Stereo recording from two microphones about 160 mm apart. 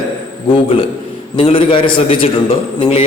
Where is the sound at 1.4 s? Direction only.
35° left (ahead or behind).